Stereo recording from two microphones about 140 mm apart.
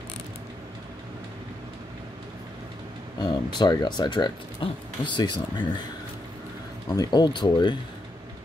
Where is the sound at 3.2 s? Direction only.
30° left (ahead or behind).